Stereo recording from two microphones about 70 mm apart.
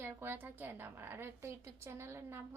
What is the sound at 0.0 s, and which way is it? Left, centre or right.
A woman's voice, right.